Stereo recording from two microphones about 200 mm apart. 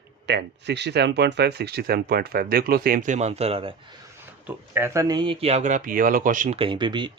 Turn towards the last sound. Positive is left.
turn(degrees=-25)  # may be behind; listen again after turning